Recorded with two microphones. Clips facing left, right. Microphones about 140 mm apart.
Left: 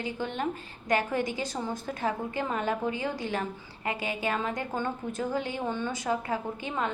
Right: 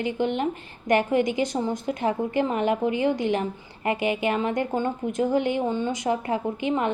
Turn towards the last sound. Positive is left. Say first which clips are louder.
# right 7 dB
turn(degrees=-20)  # may be behind; listen again after turning